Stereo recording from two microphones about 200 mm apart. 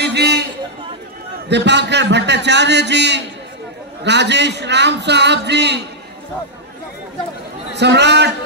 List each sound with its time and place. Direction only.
0.0 s a man's voice: 55° right (ahead or behind)
1.5 s a man's voice: 60° right (ahead or behind)
7.7 s a man's voice: 60° right (ahead or behind)